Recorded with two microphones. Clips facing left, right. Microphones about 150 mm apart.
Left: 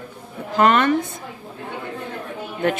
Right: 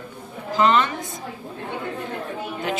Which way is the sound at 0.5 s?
55° left (ahead or behind).